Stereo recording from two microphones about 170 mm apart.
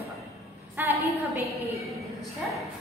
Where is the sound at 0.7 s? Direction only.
10° right (ahead or behind).